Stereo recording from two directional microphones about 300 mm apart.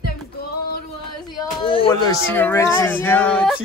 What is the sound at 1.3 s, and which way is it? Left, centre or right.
Speech, centre.